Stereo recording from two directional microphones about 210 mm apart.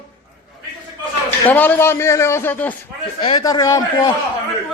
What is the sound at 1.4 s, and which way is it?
Speech, 10° left (ahead or behind).